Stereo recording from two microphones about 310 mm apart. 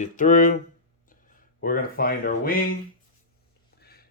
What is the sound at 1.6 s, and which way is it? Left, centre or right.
Speech, left.